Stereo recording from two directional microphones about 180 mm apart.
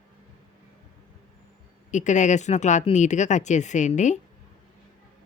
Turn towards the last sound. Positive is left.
turn(degrees=40)  # may be behind; listen again after turning